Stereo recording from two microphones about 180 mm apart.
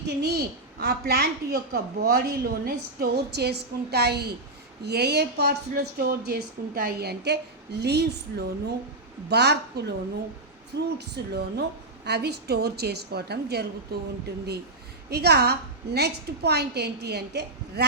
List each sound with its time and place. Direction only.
0.1 s a woman's voice: 65° right (ahead or behind)
15.1 s a woman's voice: 65° right (ahead or behind)